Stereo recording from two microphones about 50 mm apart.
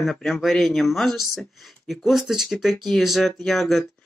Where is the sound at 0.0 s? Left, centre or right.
Centre.